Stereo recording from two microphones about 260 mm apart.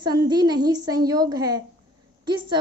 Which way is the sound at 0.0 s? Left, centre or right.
Centre.